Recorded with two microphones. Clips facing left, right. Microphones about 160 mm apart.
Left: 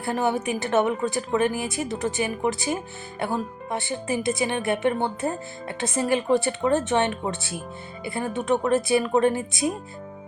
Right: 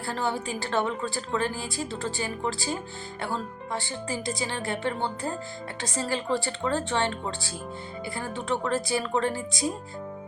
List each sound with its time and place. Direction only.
0.0 s a woman's voice: 15° left (ahead or behind)